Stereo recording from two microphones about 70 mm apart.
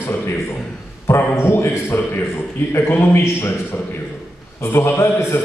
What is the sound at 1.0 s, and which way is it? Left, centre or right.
A man's voice, left.